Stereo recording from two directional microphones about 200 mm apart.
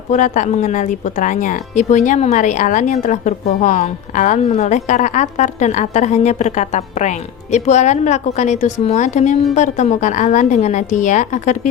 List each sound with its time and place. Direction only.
0.1 s a woman's voice: 35° left (ahead or behind)